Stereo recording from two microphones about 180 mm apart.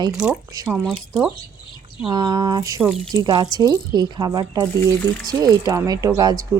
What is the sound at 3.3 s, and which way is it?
Speech, 20° right (ahead or behind).